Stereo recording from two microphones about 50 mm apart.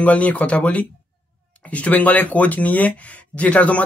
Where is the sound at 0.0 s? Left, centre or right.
Left.